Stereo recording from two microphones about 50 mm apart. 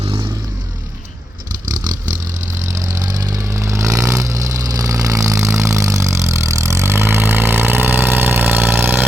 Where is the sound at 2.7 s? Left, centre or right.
Right.